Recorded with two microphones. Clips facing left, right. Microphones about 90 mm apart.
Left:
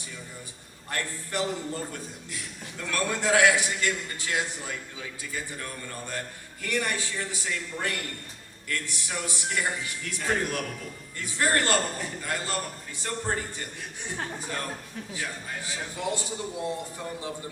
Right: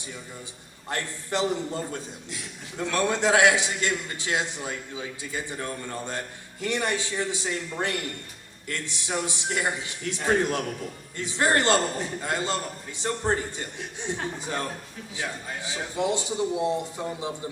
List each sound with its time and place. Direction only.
0.9 s a man's voice: 20° right (ahead or behind)